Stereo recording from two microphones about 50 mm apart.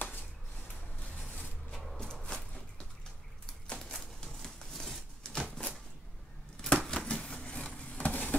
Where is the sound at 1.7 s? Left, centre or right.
Centre.